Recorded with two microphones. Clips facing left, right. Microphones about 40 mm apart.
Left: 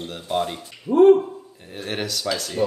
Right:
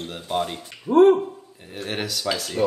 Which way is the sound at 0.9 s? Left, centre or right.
Right.